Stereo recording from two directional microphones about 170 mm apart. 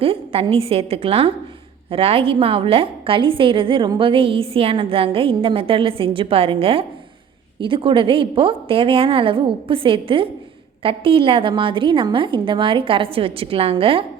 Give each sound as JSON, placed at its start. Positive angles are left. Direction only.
{"t": 0.0, "sound": "a woman's voice", "side_deg": -35}